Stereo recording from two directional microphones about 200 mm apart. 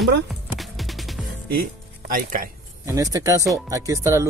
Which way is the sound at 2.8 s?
15° right (ahead or behind).